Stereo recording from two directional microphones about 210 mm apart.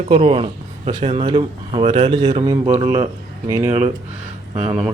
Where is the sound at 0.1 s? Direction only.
30° right (ahead or behind).